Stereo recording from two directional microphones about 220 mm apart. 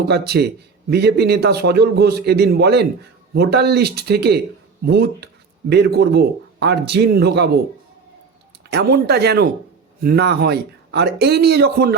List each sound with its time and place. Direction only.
0.0 s speech: 50° right (ahead or behind)
8.7 s speech: 45° right (ahead or behind)